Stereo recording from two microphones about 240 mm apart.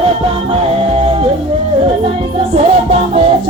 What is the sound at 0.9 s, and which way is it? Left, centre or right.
Music, right.